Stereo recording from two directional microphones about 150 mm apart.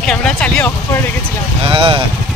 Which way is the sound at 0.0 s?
5° left (ahead or behind).